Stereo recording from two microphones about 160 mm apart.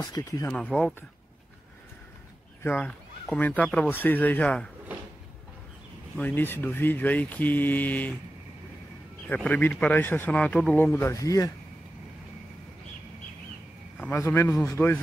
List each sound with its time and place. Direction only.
0.0 s speech: 20° left (ahead or behind)
0.5 s a man's voice: 10° left (ahead or behind)
2.6 s a man's voice: 10° left (ahead or behind)
6.1 s a man's voice: 10° left (ahead or behind)
9.3 s a man's voice: 10° left (ahead or behind)
13.9 s a man's voice: 10° left (ahead or behind)